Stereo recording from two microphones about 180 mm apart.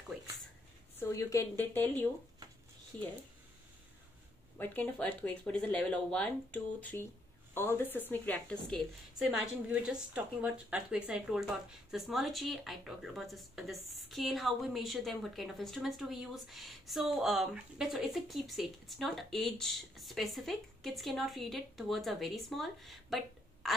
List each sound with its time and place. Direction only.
0.9 s speech: 15° left (ahead or behind)
4.6 s a woman's voice: 10° left (ahead or behind)